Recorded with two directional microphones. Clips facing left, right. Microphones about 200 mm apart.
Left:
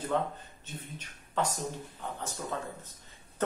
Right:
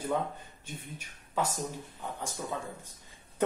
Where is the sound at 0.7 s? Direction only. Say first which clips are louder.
Left 4 dB; 10° right (ahead or behind).